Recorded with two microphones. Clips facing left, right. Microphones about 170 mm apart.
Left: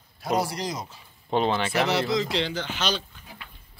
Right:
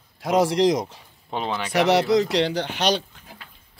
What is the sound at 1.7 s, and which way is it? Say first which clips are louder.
Speech: right 6 dB; 70° right (ahead or behind).